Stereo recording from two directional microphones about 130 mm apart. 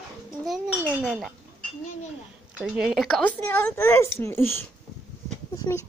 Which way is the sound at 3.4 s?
15° left (ahead or behind).